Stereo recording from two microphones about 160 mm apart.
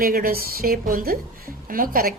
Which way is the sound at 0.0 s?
65° right (ahead or behind).